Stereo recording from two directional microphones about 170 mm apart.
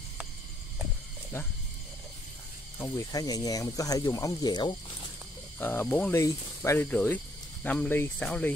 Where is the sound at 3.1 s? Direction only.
20° left (ahead or behind).